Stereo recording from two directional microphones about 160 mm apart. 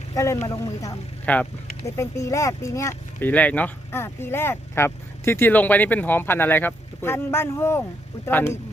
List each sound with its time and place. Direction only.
0.1 s speech: 20° left (ahead or behind)
1.2 s speech: 10° left (ahead or behind)